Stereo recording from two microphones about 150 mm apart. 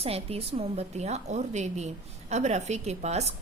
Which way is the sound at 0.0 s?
40° right (ahead or behind).